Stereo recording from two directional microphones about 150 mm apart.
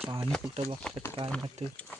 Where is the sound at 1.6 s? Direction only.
50° right (ahead or behind).